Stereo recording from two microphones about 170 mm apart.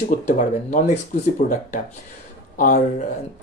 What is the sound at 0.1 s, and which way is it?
Speech, 45° left (ahead or behind).